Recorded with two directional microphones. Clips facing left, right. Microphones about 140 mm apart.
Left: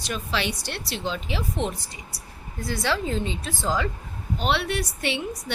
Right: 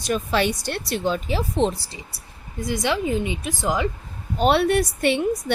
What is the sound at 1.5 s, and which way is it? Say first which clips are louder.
Speech: right 7 dB; 30° right (ahead or behind).